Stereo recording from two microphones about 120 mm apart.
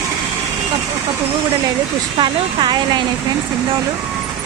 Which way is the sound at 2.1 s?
40° right (ahead or behind).